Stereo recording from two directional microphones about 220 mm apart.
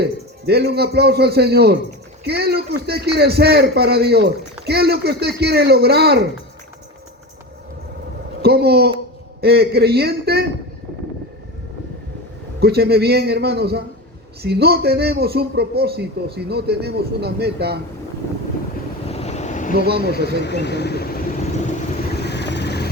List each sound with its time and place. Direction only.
0.0 s a man's voice: 45° right (ahead or behind)
8.4 s a man's voice: 45° right (ahead or behind)
12.5 s a man's voice: 45° right (ahead or behind)
19.0 s vehicle: 30° left (ahead or behind)
19.7 s a man's voice: 45° right (ahead or behind)
20.2 s speech: 50° left (ahead or behind)
22.3 s vehicle: 50° left (ahead or behind)